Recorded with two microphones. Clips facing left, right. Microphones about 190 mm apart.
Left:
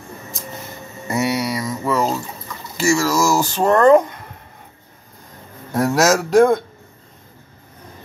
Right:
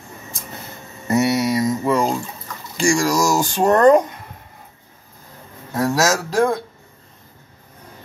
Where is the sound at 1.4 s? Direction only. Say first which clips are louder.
Right 4 dB; 15° right (ahead or behind).